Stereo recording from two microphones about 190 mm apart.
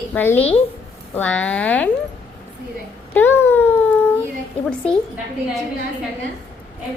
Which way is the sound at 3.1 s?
10° left (ahead or behind).